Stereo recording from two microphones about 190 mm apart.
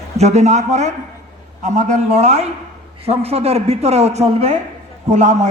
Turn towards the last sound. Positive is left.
turn(degrees=-40)  # may be behind; listen again after turning